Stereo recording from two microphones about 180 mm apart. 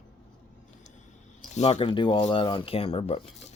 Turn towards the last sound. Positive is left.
turn(degrees=30)  # may be behind; listen again after turning